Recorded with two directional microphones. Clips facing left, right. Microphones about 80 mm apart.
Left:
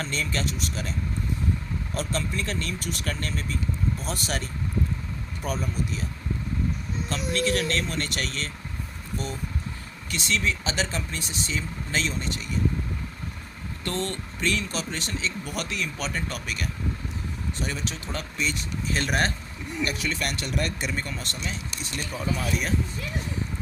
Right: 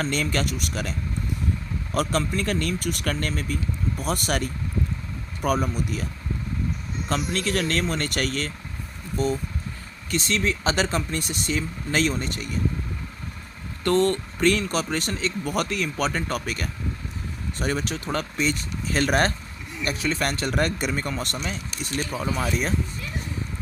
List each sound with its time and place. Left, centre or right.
0.1 s a man's voice: right
2.3 s speech: right
3.1 s speech: right
7.1 s speech: right
10.1 s speech: right
13.8 s speech: right
19.9 s speech: right